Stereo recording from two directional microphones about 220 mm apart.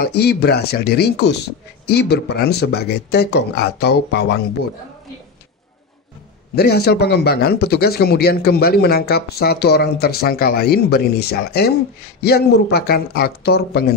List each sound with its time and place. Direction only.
0.1 s speech: 50° left (ahead or behind)
6.5 s speech: 45° left (ahead or behind)